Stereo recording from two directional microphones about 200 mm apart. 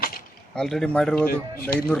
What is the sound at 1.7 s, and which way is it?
Speech, 45° left (ahead or behind).